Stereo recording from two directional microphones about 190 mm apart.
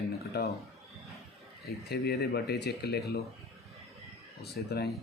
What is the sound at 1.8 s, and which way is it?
Speech, 60° left (ahead or behind).